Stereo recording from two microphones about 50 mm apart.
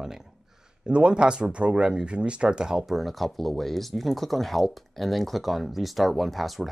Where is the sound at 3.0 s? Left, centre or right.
Centre.